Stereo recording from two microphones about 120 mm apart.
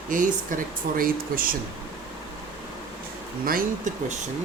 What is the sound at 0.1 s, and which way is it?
Speech, 90° right.